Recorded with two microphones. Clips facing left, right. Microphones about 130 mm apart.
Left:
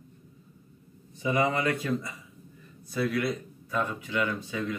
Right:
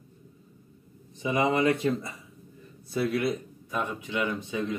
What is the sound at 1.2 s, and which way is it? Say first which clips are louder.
Speech: right 2 dB; 20° right (ahead or behind).